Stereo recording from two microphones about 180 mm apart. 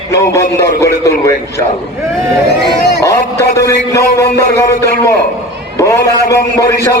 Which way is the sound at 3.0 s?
15° left (ahead or behind).